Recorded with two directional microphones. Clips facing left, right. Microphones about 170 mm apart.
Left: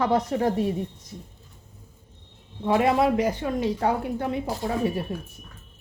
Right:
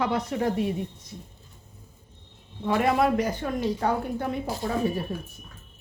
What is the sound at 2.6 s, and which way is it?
Speech, 25° left (ahead or behind).